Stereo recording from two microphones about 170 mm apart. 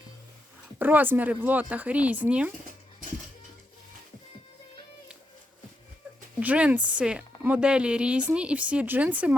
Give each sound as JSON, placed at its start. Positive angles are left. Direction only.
{"t": 0.8, "sound": "speech", "side_deg": -10}
{"t": 6.4, "sound": "speech", "side_deg": -10}